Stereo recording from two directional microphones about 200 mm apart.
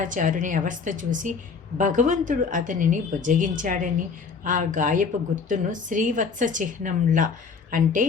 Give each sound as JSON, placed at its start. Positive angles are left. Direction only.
{"t": 0.0, "sound": "a woman's voice", "side_deg": -40}